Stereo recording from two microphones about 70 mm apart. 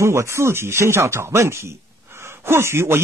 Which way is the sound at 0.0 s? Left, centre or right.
Right.